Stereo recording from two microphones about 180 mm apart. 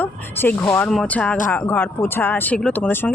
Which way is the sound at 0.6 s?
15° left (ahead or behind).